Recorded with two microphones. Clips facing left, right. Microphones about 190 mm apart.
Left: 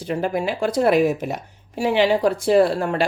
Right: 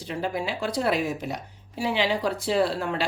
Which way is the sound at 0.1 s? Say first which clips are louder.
Left 6 dB; 55° left (ahead or behind).